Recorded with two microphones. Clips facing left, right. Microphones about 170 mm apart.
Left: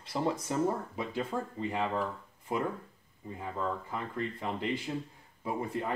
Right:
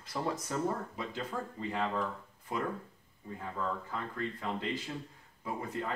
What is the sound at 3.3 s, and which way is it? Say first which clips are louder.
Speech: left 2 dB; 15° left (ahead or behind).